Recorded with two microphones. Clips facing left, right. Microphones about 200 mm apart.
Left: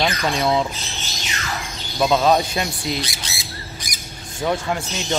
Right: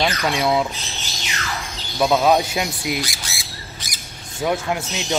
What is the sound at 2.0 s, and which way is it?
Speech, 5° right (ahead or behind).